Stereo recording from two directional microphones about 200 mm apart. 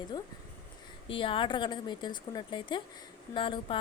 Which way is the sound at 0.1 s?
20° left (ahead or behind).